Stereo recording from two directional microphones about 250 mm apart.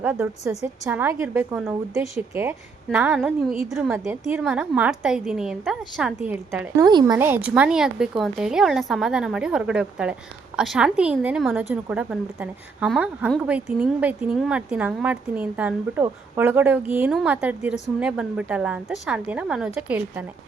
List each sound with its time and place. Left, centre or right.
0.0 s a woman's voice: centre